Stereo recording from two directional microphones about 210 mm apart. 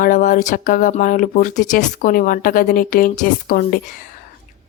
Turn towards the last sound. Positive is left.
turn(degrees=45)  # may be behind; listen again after turning